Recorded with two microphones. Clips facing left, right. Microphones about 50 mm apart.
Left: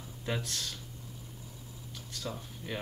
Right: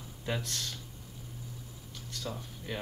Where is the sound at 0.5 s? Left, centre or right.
Centre.